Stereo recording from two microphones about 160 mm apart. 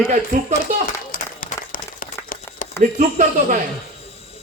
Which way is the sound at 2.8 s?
50° right (ahead or behind).